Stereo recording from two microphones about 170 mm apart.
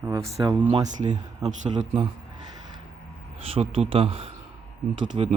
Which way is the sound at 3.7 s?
35° right (ahead or behind).